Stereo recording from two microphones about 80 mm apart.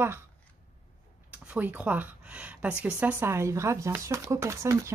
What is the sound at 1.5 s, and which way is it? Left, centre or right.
Speech, centre.